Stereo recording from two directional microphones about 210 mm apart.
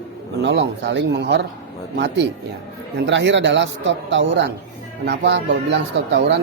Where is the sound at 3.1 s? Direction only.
60° right (ahead or behind).